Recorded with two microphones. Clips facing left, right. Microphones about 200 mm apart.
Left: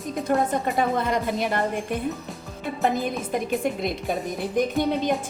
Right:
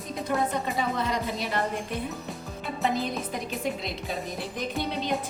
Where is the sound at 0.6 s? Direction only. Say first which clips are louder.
Left 5 dB; 50° left (ahead or behind).